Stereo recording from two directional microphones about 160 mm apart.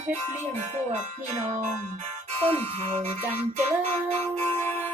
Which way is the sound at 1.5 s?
45° right (ahead or behind).